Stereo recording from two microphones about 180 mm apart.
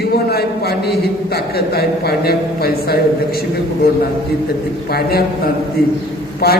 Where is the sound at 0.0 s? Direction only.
60° left (ahead or behind).